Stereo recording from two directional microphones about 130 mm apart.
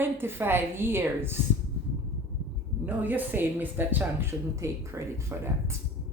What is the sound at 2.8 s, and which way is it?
A woman's voice, 15° right (ahead or behind).